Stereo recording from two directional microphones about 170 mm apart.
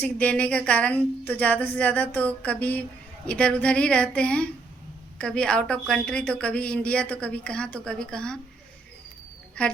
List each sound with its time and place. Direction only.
0.0 s a woman's voice: 10° left (ahead or behind)
9.6 s a woman's voice: 10° left (ahead or behind)